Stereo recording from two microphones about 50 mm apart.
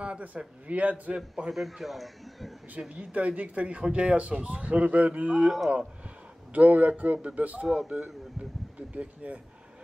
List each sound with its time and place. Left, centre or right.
0.0 s a man's voice: right
1.5 s a man's voice: centre
2.8 s speech: right
6.5 s a man's voice: right
7.6 s a man's voice: centre
8.9 s speech: right